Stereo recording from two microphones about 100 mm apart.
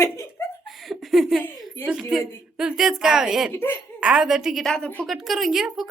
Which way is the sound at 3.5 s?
25° left (ahead or behind).